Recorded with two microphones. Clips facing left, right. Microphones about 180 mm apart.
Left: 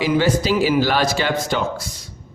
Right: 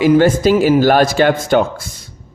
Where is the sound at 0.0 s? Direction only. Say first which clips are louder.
Right 7 dB; 50° right (ahead or behind).